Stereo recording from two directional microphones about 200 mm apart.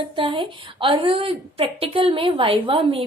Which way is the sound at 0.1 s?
25° right (ahead or behind).